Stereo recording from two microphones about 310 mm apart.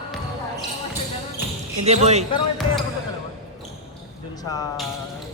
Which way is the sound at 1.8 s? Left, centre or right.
Right.